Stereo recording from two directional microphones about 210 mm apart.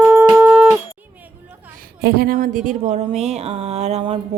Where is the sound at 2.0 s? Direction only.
45° right (ahead or behind); by 4.1 s 30° right (ahead or behind).